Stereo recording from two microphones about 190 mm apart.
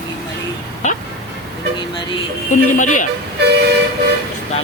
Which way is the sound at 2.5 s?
40° left (ahead or behind).